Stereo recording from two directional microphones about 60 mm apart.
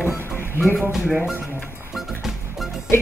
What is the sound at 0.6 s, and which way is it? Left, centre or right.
Speech, centre.